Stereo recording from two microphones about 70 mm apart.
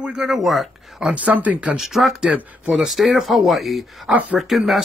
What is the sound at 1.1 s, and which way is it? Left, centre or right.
Speech, right.